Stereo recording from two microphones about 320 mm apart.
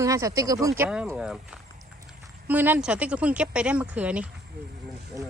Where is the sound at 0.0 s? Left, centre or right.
Centre.